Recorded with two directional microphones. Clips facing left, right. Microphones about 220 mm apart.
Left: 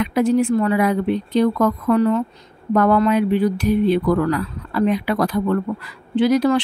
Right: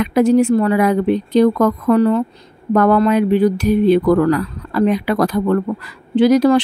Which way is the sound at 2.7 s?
45° right (ahead or behind).